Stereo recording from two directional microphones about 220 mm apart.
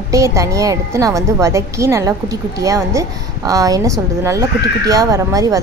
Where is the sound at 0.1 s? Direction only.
15° right (ahead or behind).